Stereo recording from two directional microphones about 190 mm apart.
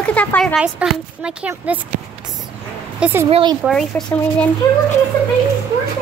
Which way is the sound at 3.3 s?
25° right (ahead or behind).